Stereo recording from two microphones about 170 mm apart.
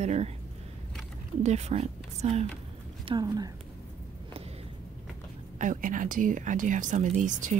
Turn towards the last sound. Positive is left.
turn(degrees=-45)  # may be behind; listen again after turning